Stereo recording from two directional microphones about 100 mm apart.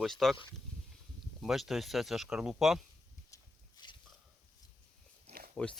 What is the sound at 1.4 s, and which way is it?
Speech, centre (ahead or behind).